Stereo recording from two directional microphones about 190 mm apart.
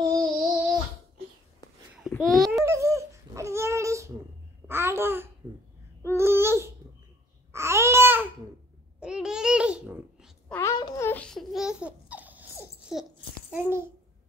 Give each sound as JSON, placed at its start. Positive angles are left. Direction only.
{"t": 0.0, "sound": "babbling", "side_deg": -20}
{"t": 2.0, "sound": "babbling", "side_deg": 0}
{"t": 2.6, "sound": "a sound", "side_deg": -15}
{"t": 4.6, "sound": "a child's voice", "side_deg": -10}
{"t": 6.0, "sound": "babbling", "side_deg": -15}
{"t": 10.5, "sound": "babbling", "side_deg": 20}